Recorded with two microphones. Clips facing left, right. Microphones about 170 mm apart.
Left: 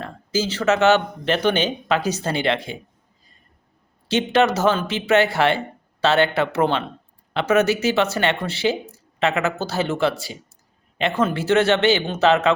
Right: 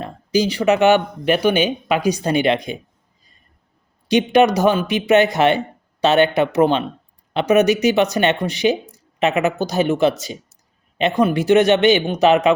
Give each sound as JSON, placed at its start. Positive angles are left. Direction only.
{"t": 0.0, "sound": "speech", "side_deg": -15}
{"t": 4.1, "sound": "speech", "side_deg": -15}